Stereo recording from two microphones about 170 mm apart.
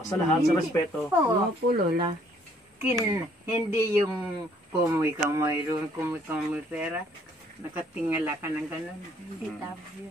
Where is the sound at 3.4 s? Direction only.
15° right (ahead or behind).